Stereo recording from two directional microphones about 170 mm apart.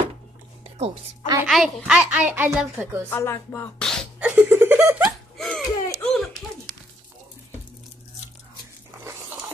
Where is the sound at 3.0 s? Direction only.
15° left (ahead or behind).